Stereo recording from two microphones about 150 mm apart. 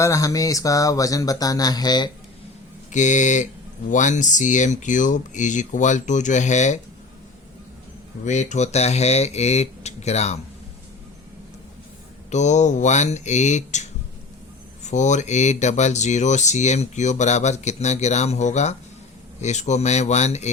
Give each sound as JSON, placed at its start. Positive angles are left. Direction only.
{"t": 0.0, "sound": "speech", "side_deg": 20}
{"t": 2.9, "sound": "speech", "side_deg": 55}
{"t": 8.2, "sound": "speech", "side_deg": 55}
{"t": 12.3, "sound": "speech", "side_deg": 50}
{"t": 14.8, "sound": "speech", "side_deg": 55}